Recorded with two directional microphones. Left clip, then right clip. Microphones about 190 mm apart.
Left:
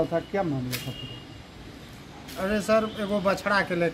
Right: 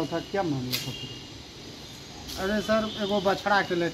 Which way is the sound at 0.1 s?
60° left (ahead or behind).